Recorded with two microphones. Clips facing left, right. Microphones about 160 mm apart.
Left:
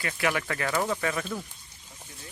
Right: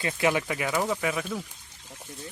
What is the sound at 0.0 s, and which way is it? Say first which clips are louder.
Speech: right 3 dB; 20° right (ahead or behind).